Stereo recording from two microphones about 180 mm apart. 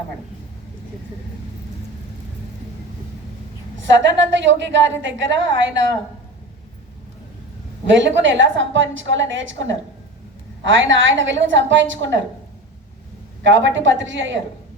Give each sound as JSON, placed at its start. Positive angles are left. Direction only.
{"t": 3.8, "sound": "a woman's voice", "side_deg": -90}
{"t": 7.9, "sound": "a woman's voice", "side_deg": -90}
{"t": 13.4, "sound": "a woman's voice", "side_deg": -90}